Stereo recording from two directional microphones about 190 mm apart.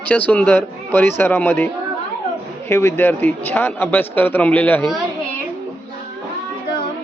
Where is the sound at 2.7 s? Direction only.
10° left (ahead or behind).